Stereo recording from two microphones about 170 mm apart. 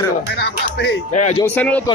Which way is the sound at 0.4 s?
80° left.